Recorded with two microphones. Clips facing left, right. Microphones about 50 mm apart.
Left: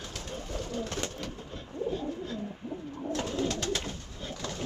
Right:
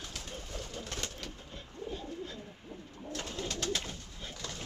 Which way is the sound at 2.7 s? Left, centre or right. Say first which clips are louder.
Left 7 dB; left.